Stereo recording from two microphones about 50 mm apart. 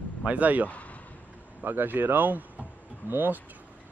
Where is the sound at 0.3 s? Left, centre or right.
Right.